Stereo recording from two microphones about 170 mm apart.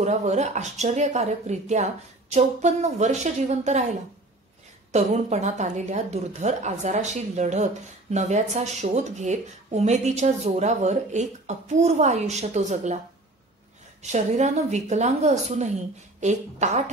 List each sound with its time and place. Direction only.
0.0 s a woman's voice: 40° right (ahead or behind)
4.9 s a woman's voice: 40° right (ahead or behind)
14.1 s a woman's voice: 45° right (ahead or behind)